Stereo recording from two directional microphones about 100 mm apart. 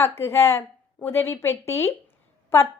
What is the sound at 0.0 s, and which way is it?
A woman's voice, 25° left (ahead or behind).